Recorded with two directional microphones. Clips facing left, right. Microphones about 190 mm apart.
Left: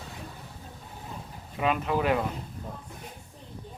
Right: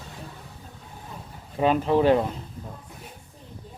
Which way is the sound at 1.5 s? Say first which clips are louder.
Right 6 dB; 30° right (ahead or behind).